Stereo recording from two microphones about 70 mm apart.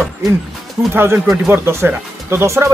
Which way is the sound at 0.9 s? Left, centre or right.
Right.